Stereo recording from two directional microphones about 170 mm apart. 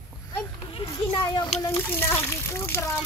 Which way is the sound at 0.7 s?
30° left (ahead or behind).